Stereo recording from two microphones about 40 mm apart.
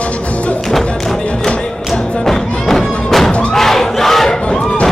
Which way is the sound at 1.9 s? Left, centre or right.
Centre.